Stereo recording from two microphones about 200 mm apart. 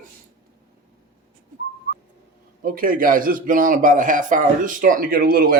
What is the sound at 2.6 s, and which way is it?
A man's voice, 45° right (ahead or behind).